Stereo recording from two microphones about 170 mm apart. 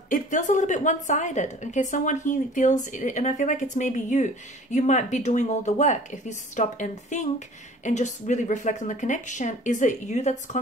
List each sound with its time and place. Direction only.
0.1 s a woman's voice: 50° left (ahead or behind)